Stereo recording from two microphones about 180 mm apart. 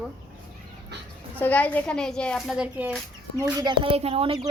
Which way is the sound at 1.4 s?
10° left (ahead or behind).